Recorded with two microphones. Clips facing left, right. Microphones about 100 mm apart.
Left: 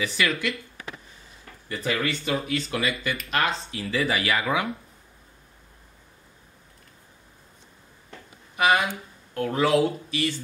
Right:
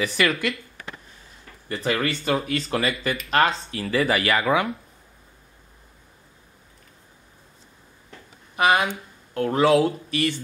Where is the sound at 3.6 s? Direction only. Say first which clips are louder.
Right 4 dB; 45° right (ahead or behind).